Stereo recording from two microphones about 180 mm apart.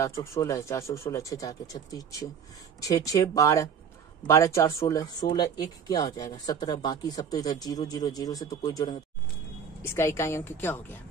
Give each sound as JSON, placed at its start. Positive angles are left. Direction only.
{"t": 0.0, "sound": "speech", "side_deg": 15}